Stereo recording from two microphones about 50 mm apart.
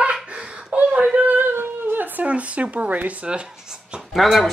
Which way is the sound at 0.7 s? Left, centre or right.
Right.